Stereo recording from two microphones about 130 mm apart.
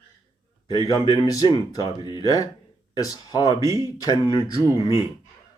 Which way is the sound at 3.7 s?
25° right (ahead or behind).